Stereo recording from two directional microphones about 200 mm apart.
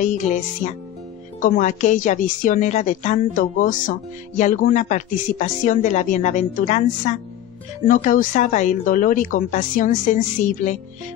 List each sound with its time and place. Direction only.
0.0 s a woman's voice: 40° left (ahead or behind)